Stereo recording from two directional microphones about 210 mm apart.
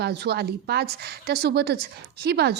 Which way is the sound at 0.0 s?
50° right (ahead or behind).